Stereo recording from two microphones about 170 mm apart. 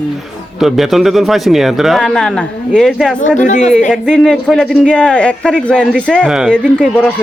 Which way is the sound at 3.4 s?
45° left (ahead or behind).